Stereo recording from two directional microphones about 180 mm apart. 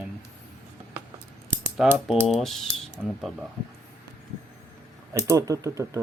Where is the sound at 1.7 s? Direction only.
Centre (ahead or behind).